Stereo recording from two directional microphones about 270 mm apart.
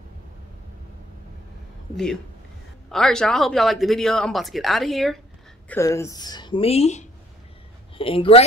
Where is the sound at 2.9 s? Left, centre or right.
Centre.